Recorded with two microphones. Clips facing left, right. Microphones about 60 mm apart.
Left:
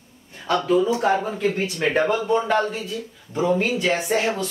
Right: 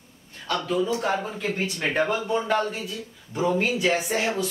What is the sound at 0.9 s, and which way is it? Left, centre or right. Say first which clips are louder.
Speech: left 5 dB; centre.